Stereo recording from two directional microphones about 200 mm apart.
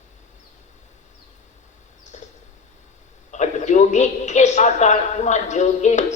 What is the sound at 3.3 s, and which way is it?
A man's voice, 35° left (ahead or behind).